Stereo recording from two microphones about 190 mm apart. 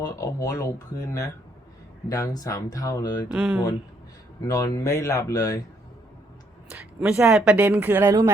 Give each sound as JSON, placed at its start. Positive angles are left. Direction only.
{"t": 0.2, "sound": "speech", "side_deg": 15}
{"t": 3.3, "sound": "speech", "side_deg": -5}
{"t": 4.4, "sound": "speech", "side_deg": 20}
{"t": 6.7, "sound": "speech", "side_deg": -5}